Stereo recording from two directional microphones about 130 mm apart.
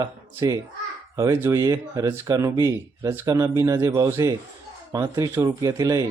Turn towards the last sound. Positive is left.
turn(degrees=-25)  # may be behind; listen again after turning